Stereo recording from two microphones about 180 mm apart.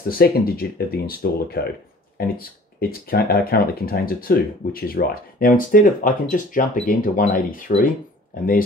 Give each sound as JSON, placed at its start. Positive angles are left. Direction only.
{"t": 0.1, "sound": "speech", "side_deg": 55}